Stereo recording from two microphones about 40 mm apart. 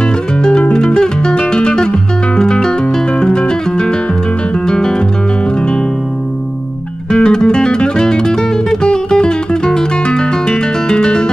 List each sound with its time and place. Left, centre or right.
0.0 s music: left
4.6 s guitar: centre
7.1 s music: left